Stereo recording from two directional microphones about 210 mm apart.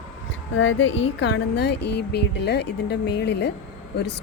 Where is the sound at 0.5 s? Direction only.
65° left (ahead or behind).